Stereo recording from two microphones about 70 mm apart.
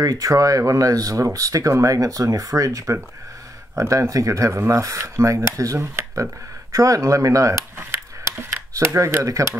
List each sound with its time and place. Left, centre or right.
0.0 s speech: right